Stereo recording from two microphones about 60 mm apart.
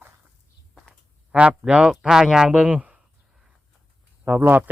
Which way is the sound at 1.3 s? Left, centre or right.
Centre.